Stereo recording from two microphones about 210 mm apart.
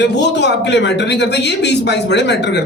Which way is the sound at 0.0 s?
55° left (ahead or behind).